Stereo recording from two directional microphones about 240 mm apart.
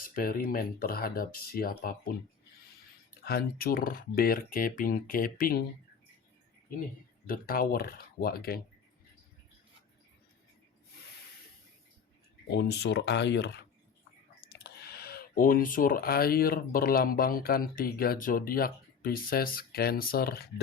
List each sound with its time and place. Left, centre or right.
0.1 s speech: left
3.2 s speech: left
7.3 s speech: left
12.5 s speech: left